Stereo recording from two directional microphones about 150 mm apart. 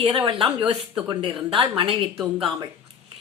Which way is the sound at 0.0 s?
35° right (ahead or behind).